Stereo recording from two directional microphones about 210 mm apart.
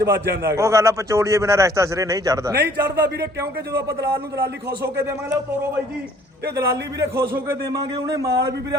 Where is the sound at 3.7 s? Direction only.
15° right (ahead or behind).